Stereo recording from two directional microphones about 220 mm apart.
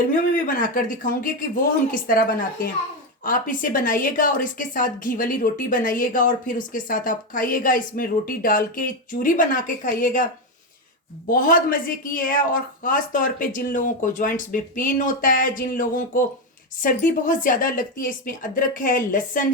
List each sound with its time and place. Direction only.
0.1 s a woman's voice: 35° left (ahead or behind)
3.2 s a woman's voice: 40° left (ahead or behind)
11.3 s a woman's voice: 40° left (ahead or behind)